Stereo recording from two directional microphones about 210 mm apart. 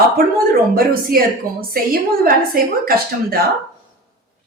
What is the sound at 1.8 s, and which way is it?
Speech, 45° right (ahead or behind).